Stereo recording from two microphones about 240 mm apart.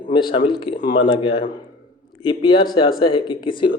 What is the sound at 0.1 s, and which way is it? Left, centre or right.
Speech, centre.